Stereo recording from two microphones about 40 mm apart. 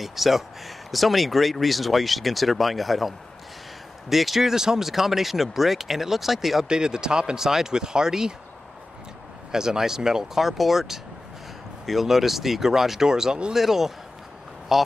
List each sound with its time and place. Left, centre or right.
0.0 s speech: centre
6.7 s speech: centre
9.5 s speech: centre